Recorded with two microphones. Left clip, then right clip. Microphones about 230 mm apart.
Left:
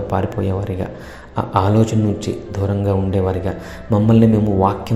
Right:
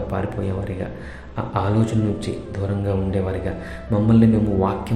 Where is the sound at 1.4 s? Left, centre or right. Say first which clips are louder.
Left 6 dB; left.